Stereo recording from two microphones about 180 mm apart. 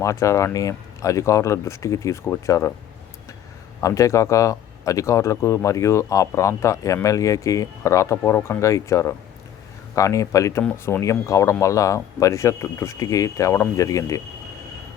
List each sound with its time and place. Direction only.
0.0 s speech: 15° left (ahead or behind)
3.8 s speech: 15° left (ahead or behind)